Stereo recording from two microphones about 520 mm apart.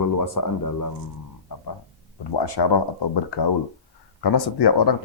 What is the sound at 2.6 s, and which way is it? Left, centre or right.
Speech, left.